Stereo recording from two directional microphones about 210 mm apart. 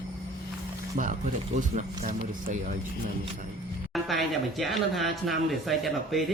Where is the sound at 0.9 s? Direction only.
35° right (ahead or behind).